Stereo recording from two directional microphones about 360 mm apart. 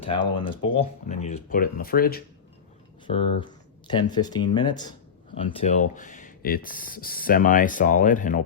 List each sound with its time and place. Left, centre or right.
0.0 s speech: centre
3.1 s speech: centre